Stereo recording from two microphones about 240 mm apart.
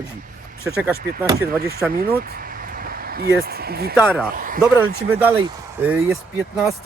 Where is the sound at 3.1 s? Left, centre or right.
Right.